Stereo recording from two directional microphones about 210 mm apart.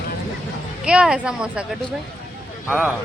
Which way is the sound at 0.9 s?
5° right (ahead or behind).